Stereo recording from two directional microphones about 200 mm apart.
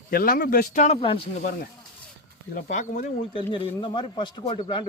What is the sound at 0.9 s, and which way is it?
Speech, 25° left (ahead or behind).